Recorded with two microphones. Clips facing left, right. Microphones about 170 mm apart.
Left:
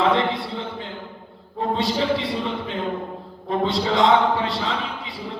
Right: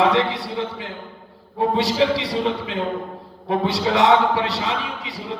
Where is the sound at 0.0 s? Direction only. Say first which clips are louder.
Right 2 dB; 70° right (ahead or behind).